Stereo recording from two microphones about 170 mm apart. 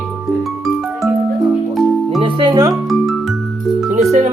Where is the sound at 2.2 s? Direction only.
30° right (ahead or behind).